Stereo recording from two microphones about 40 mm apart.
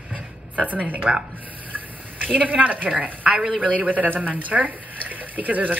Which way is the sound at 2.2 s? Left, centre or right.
Right.